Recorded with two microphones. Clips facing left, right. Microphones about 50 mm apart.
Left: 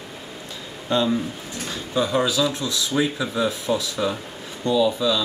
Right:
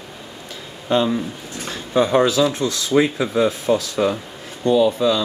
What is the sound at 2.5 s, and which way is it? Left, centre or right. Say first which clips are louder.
Speech: right 4 dB; right.